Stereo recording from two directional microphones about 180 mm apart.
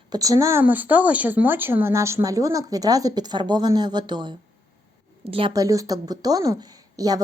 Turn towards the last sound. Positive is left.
turn(degrees=-20)  # may be behind; listen again after turning